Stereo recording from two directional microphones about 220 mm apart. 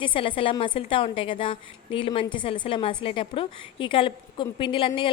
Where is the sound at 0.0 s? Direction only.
25° left (ahead or behind).